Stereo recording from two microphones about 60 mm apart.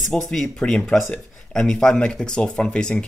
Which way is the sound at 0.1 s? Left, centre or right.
Centre.